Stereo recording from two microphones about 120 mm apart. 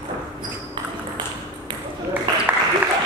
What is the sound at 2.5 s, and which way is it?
Applause, 15° right (ahead or behind).